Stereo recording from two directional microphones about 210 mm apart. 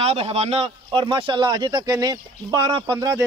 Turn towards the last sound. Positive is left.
turn(degrees=-20)  # may be behind; listen again after turning